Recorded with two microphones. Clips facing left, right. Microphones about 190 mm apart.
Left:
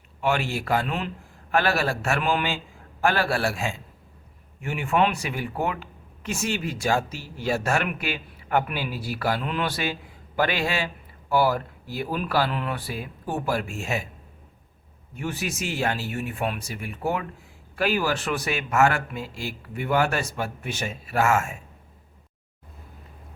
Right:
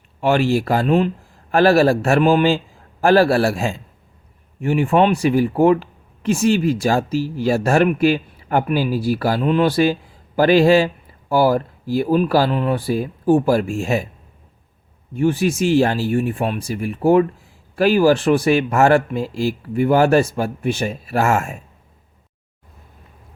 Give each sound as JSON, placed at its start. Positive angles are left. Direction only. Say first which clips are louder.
{"t": 0.2, "sound": "speech", "louder": "right 9 dB", "side_deg": -35}
{"t": 15.2, "sound": "speech", "louder": "right 13 dB", "side_deg": -30}